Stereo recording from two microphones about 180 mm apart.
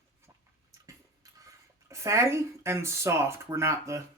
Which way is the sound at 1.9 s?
15° right (ahead or behind).